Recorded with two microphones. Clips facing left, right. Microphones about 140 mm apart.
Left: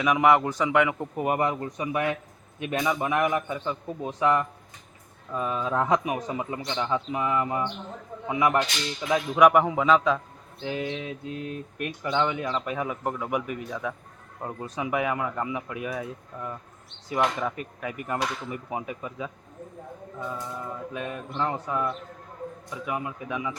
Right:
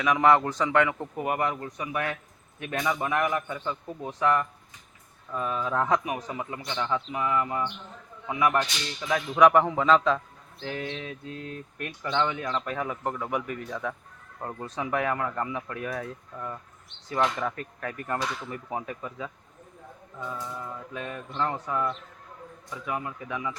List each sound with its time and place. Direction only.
0.0 s a man's voice: 15° left (ahead or behind)
20.9 s speech: 15° left (ahead or behind)